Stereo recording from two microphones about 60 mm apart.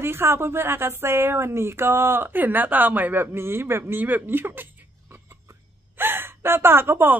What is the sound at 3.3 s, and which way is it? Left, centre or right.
Speech, right.